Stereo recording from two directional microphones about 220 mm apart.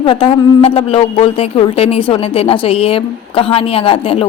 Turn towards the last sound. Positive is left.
turn(degrees=25)  # may be behind; listen again after turning